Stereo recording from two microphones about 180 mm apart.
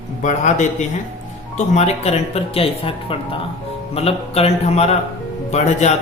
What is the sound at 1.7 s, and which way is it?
Speech, 35° left (ahead or behind).